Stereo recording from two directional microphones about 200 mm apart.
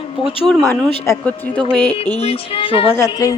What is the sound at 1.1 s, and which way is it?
Speech, 10° left (ahead or behind).